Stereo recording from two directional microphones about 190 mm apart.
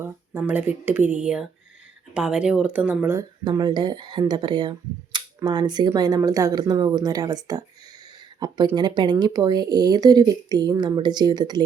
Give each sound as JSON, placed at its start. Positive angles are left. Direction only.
{"t": 0.0, "sound": "speech", "side_deg": -10}
{"t": 3.4, "sound": "speech", "side_deg": -20}